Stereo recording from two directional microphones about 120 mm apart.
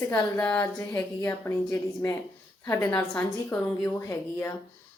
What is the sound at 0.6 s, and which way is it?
Speech, 25° left (ahead or behind).